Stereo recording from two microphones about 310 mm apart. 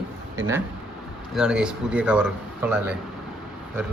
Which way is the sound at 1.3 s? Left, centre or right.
Centre.